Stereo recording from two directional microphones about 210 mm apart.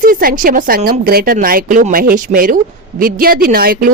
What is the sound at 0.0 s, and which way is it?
Speech, 40° right (ahead or behind).